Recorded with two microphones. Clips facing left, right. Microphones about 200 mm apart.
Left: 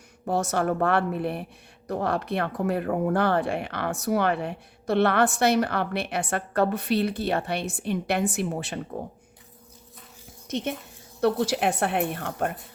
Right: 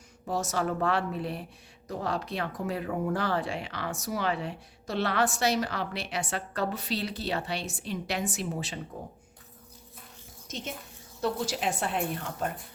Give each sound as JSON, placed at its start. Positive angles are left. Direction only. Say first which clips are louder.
{"t": 0.3, "sound": "speech", "louder": "left 5 dB", "side_deg": 60}
{"t": 10.5, "sound": "speech", "louder": "left 9 dB", "side_deg": 60}